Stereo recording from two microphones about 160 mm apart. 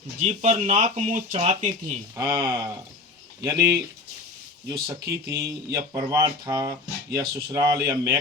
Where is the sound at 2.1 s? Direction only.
20° right (ahead or behind).